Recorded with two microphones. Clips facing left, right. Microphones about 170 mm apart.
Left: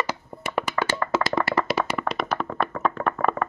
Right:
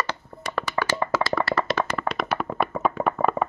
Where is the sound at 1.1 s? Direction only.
20° left (ahead or behind).